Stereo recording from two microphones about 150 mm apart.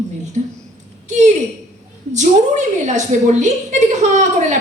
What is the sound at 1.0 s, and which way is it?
A woman's voice, 55° right (ahead or behind).